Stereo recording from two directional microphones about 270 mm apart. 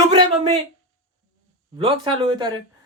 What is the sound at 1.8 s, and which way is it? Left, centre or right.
Speech, centre.